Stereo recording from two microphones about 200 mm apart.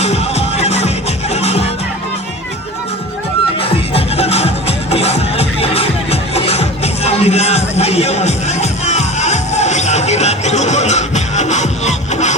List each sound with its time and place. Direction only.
0.0 s music: 30° left (ahead or behind)
3.6 s music: 30° left (ahead or behind)